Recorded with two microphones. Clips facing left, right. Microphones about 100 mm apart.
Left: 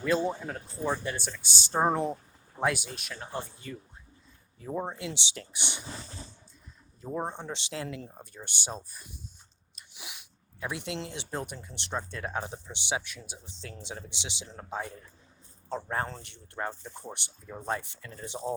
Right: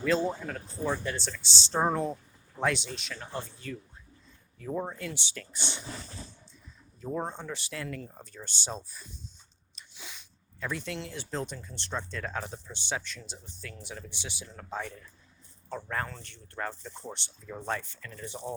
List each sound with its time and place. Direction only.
0.0 s speech: 10° left (ahead or behind)
0.4 s speech: 25° left (ahead or behind)
1.0 s speech: 15° left (ahead or behind)
2.6 s speech: 5° left (ahead or behind)
7.0 s speech: 15° left (ahead or behind)
8.1 s speech: 10° left (ahead or behind)
9.9 s sneeze: 15° left (ahead or behind)
10.9 s speech: 25° left (ahead or behind); by 13.5 s 10° left (ahead or behind)
13.6 s speech: 25° left (ahead or behind)
16.2 s speech: 15° left (ahead or behind)
18.5 s speech: 30° left (ahead or behind)